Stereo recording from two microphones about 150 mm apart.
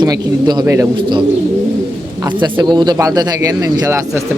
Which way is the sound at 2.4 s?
30° right (ahead or behind).